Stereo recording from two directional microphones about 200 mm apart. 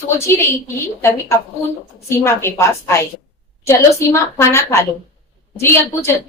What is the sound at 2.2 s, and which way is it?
A woman's voice, 15° left (ahead or behind).